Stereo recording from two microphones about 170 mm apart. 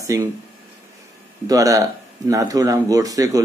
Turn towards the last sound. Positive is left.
turn(degrees=-20)  # may be behind; listen again after turning